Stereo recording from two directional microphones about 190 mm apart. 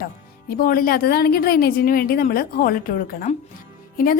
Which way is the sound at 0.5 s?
50° left (ahead or behind).